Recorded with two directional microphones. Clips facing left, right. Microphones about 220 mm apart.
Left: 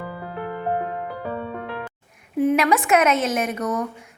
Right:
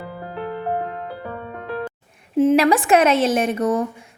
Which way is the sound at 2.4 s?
30° right (ahead or behind).